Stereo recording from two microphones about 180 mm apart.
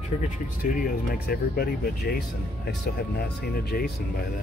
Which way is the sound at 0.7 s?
55° left (ahead or behind).